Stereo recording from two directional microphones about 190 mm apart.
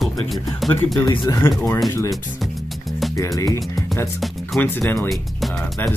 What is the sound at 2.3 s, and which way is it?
Music, centre (ahead or behind).